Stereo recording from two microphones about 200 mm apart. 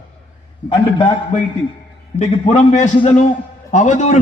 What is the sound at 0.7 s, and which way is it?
Speech, 25° left (ahead or behind).